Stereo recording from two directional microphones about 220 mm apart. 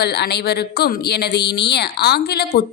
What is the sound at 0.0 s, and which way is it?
A woman's voice, 50° left (ahead or behind).